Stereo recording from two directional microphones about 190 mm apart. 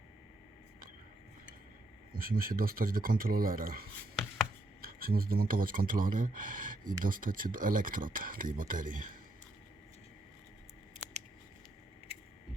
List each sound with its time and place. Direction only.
2.1 s speech: 50° right (ahead or behind)